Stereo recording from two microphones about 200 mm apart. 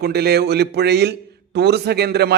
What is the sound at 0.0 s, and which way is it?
A man's voice, 55° right (ahead or behind).